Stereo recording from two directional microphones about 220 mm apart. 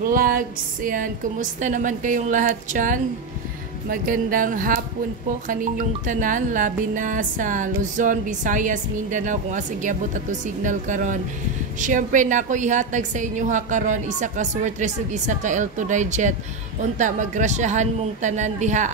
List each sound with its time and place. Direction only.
0.1 s speech: 40° right (ahead or behind)